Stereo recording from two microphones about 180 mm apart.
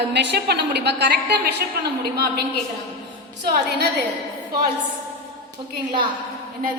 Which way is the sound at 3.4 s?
65° right (ahead or behind).